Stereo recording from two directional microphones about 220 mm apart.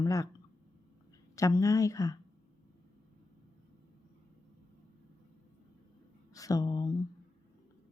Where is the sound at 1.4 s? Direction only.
15° left (ahead or behind).